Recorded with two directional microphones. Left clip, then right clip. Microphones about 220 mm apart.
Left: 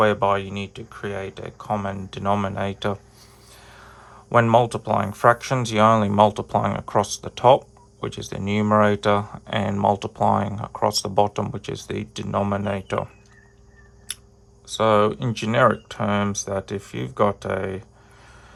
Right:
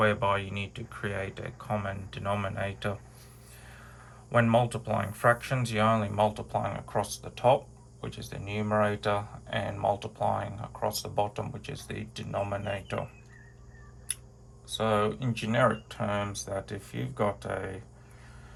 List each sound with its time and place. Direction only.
0.0 s speech: 20° left (ahead or behind)
14.7 s speech: 30° left (ahead or behind)